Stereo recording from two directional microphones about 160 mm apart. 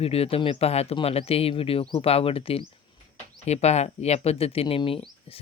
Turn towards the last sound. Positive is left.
turn(degrees=35)  # may be behind; listen again after turning